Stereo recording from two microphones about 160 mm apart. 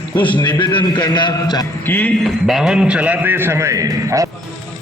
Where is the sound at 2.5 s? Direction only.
5° right (ahead or behind); by 4.2 s 20° right (ahead or behind).